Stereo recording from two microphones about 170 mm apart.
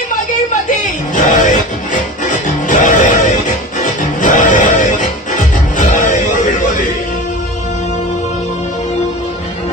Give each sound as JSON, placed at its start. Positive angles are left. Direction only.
{"t": 1.1, "sound": "music", "side_deg": 45}